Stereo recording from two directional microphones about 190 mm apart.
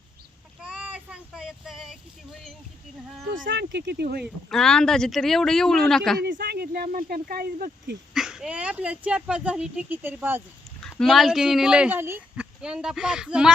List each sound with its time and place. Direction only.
0.6 s child singing: 5° right (ahead or behind)
3.5 s speech: 65° right (ahead or behind)
4.2 s speech: centre (ahead or behind)
6.1 s speech: 55° right (ahead or behind)
8.1 s speech: 5° right (ahead or behind)
10.8 s speech: 5° left (ahead or behind)